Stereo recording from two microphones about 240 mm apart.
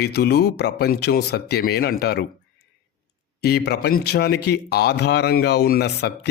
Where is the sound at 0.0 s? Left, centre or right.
Left.